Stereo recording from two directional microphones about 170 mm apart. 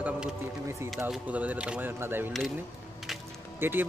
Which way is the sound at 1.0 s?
10° right (ahead or behind).